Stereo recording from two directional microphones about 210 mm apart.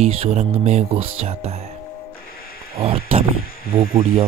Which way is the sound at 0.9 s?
80° right.